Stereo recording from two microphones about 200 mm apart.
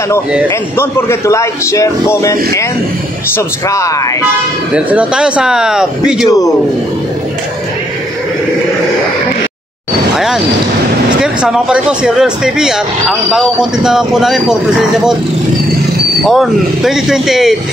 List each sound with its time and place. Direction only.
0.7 s a man's voice: 15° left (ahead or behind)
4.7 s speech: 5° right (ahead or behind)
6.2 s a man's voice: 20° left (ahead or behind)
10.1 s speech: centre (ahead or behind)
16.3 s speech: centre (ahead or behind)